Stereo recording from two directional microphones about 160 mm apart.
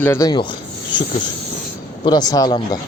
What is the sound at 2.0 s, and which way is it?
Speech, 25° left (ahead or behind).